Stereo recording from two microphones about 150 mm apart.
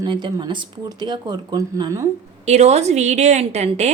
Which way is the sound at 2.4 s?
45° right (ahead or behind).